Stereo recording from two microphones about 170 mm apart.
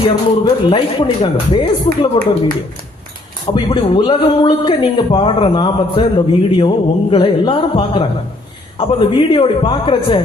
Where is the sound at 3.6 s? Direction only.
30° left (ahead or behind).